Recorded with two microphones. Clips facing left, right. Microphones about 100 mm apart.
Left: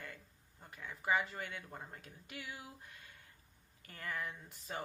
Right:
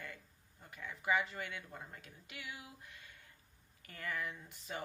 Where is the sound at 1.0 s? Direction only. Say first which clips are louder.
Even; 40° left (ahead or behind).